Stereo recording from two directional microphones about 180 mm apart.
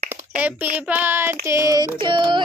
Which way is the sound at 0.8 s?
10° right (ahead or behind).